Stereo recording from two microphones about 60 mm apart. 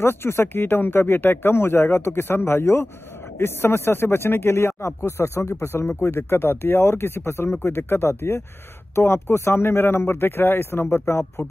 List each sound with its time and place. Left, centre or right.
0.0 s speech: left
6.3 s speech: left